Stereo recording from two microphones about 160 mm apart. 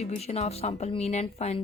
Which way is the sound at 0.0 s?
40° left (ahead or behind).